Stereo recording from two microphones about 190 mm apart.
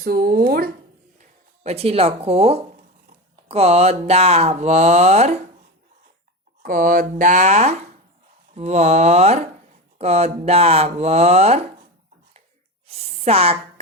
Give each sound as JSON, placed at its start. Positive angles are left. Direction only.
{"t": 0.0, "sound": "speech", "side_deg": -50}
{"t": 1.2, "sound": "speech", "side_deg": -35}
{"t": 6.6, "sound": "speech", "side_deg": -45}
{"t": 12.9, "sound": "speech", "side_deg": -35}